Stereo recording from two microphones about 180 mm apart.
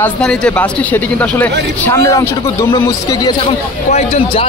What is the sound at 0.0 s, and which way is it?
A man's voice, 5° left (ahead or behind).